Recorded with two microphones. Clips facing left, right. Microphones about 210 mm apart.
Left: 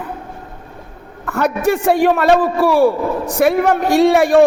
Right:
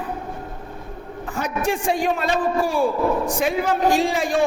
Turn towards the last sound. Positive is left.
turn(degrees=65)  # may be behind; listen again after turning